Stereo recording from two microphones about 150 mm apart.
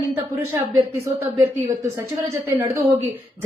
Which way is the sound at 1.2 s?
30° right (ahead or behind).